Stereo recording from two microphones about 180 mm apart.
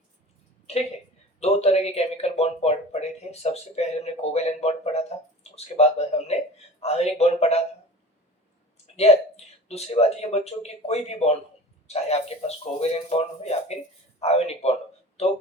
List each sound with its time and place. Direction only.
1.4 s speech: 35° left (ahead or behind)
9.0 s speech: 35° left (ahead or behind)